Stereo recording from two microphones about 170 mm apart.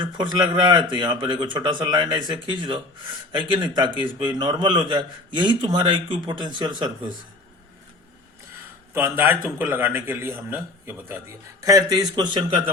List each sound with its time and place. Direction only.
0.0 s a man's voice: 25° right (ahead or behind)
8.9 s a man's voice: 15° right (ahead or behind)